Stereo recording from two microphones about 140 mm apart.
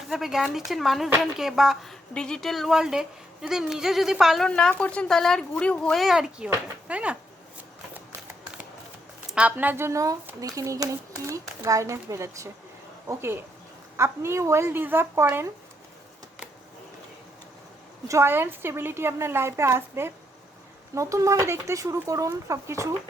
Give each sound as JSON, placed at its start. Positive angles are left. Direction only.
{"t": 0.1, "sound": "speech", "side_deg": 0}
{"t": 9.3, "sound": "a woman's voice", "side_deg": -10}
{"t": 18.1, "sound": "a woman's voice", "side_deg": -15}